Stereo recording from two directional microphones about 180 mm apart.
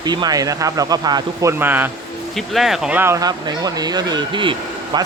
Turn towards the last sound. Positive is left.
turn(degrees=-25)  # may be behind; listen again after turning